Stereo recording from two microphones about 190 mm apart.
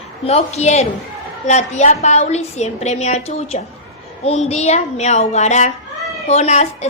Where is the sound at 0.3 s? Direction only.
35° left (ahead or behind).